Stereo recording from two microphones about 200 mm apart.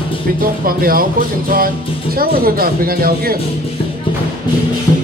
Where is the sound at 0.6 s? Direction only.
45° right (ahead or behind).